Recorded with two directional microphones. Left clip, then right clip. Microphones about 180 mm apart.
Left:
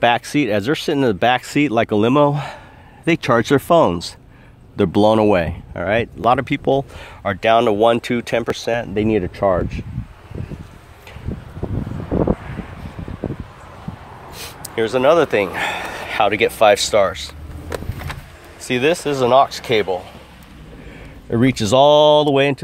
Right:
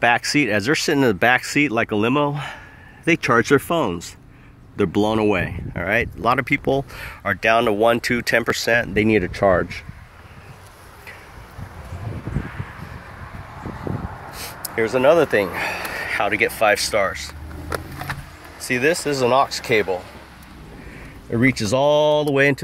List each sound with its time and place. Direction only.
0.0 s speech: 10° left (ahead or behind)
8.5 s speech: centre (ahead or behind)
14.3 s a sound: 15° left (ahead or behind)
14.9 s speech: centre (ahead or behind)
16.2 s speech: 15° left (ahead or behind)
21.3 s speech: 20° left (ahead or behind)